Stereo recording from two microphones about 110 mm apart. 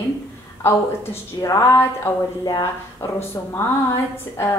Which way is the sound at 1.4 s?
30° left (ahead or behind).